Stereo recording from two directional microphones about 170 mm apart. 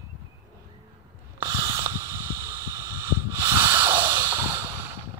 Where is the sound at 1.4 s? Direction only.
20° right (ahead or behind).